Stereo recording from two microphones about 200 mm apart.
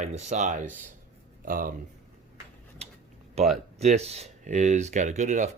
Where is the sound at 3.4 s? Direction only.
30° right (ahead or behind).